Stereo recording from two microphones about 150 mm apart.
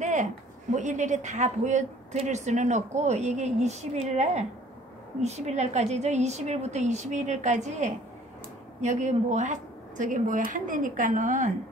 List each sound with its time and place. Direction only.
0.0 s speech: 55° right (ahead or behind)